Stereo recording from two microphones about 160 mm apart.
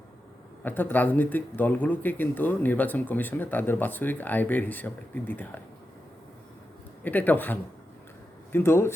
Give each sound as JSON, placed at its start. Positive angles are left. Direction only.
{"t": 0.6, "sound": "speech", "side_deg": 10}
{"t": 7.0, "sound": "speech", "side_deg": 10}